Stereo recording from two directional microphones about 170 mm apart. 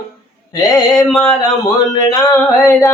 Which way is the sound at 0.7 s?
20° left (ahead or behind).